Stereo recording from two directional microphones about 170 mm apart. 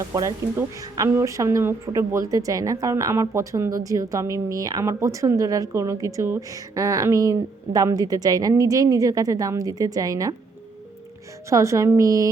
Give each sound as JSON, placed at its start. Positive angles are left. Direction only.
{"t": 0.1, "sound": "a woman's voice", "side_deg": -20}
{"t": 11.4, "sound": "a woman's voice", "side_deg": -15}